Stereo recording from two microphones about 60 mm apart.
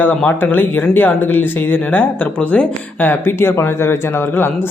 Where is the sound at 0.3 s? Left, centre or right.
Left.